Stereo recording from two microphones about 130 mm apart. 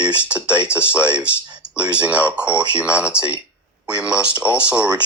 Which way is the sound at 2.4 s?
20° left (ahead or behind).